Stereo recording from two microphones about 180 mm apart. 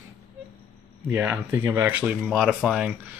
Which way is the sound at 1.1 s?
10° right (ahead or behind).